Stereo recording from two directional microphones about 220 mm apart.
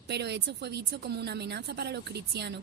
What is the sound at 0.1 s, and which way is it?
A woman's voice, 50° right (ahead or behind).